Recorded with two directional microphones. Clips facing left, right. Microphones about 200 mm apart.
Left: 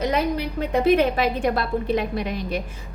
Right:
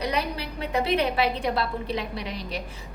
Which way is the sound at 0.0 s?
50° left (ahead or behind).